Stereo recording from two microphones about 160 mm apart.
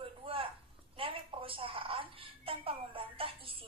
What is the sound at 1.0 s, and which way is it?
Music, 35° right (ahead or behind).